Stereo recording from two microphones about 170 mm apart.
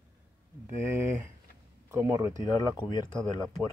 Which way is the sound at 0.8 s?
15° right (ahead or behind).